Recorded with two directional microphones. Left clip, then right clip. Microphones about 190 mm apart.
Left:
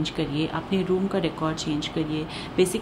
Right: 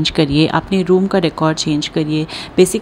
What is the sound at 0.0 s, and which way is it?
Speech, 45° right (ahead or behind).